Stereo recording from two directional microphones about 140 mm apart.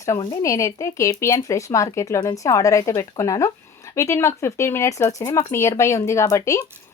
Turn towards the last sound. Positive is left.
turn(degrees=25)  # may be behind; listen again after turning